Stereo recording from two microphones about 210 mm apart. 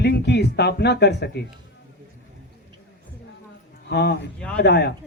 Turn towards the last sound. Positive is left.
turn(degrees=55)  # may be behind; listen again after turning